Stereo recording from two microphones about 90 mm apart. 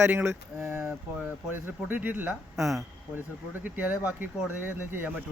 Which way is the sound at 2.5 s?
Centre (ahead or behind).